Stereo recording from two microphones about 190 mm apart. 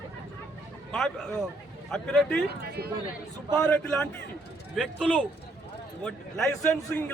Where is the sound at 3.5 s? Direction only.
5° left (ahead or behind).